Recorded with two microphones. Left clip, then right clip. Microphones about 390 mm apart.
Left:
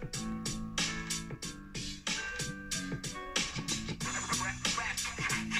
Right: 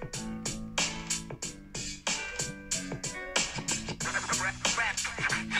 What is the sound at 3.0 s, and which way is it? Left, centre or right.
Music, right.